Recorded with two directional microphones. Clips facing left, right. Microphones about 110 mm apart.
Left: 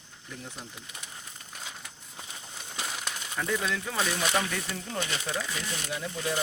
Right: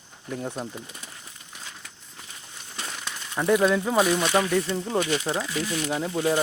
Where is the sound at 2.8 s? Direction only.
5° left (ahead or behind).